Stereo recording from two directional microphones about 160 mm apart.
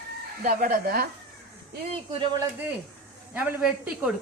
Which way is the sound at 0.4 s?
60° right (ahead or behind).